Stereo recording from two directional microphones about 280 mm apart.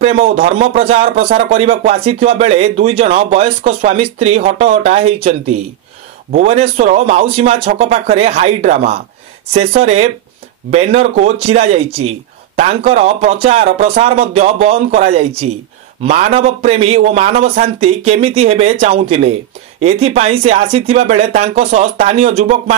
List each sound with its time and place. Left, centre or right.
0.0 s speech: right
6.3 s speech: right